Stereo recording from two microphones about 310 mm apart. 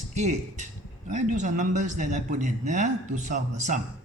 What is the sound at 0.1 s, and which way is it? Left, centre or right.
Speech, right.